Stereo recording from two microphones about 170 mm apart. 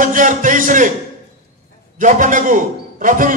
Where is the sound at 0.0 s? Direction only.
50° right (ahead or behind).